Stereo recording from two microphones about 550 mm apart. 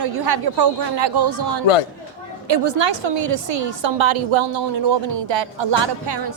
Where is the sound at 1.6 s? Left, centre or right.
Left.